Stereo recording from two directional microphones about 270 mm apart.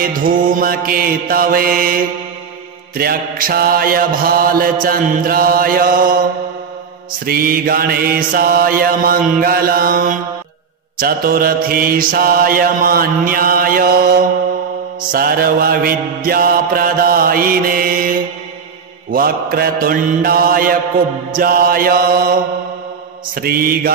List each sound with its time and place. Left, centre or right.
0.0 s mantra: right
7.2 s mantra: right